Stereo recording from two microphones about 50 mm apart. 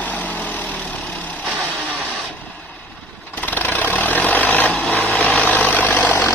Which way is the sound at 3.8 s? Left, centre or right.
Left.